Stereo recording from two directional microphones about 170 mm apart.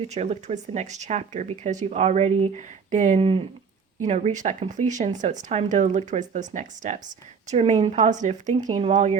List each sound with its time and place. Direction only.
0.1 s speech: 40° right (ahead or behind)
3.2 s speech: 35° right (ahead or behind)